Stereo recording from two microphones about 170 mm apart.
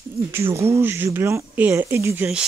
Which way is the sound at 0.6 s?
15° right (ahead or behind).